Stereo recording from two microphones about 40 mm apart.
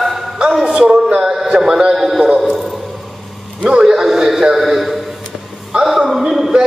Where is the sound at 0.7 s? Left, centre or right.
Centre.